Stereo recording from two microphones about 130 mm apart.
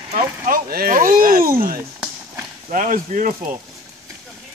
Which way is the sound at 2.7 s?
80° right.